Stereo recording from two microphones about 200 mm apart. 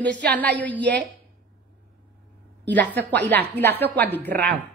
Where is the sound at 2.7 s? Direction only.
10° left (ahead or behind).